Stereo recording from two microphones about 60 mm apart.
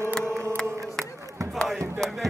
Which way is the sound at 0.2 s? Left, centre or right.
Right.